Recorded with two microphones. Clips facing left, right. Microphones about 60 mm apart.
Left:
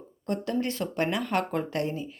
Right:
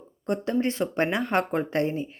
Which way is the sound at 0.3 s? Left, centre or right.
Right.